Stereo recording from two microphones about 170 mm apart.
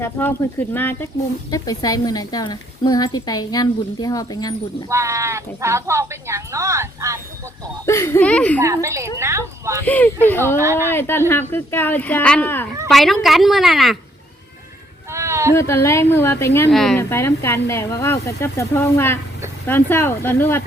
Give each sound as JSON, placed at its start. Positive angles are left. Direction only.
{"t": 0.0, "sound": "speech", "side_deg": 10}
{"t": 4.9, "sound": "speech", "side_deg": -15}
{"t": 7.9, "sound": "speech", "side_deg": 15}
{"t": 8.6, "sound": "speech", "side_deg": -15}
{"t": 9.8, "sound": "speech", "side_deg": 10}
{"t": 10.6, "sound": "speech", "side_deg": -15}
{"t": 10.8, "sound": "speech", "side_deg": 15}
{"t": 12.9, "sound": "a woman's voice", "side_deg": 0}
{"t": 15.1, "sound": "a sound", "side_deg": -15}
{"t": 15.5, "sound": "speech", "side_deg": 15}
{"t": 16.7, "sound": "a woman's voice", "side_deg": 0}
{"t": 17.0, "sound": "speech", "side_deg": 15}